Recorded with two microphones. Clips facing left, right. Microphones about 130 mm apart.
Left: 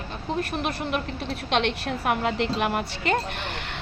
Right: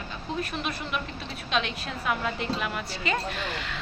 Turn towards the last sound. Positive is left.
turn(degrees=55)  # may be behind; listen again after turning